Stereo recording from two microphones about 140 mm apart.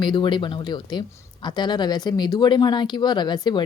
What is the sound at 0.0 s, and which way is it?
Speech, 35° left (ahead or behind).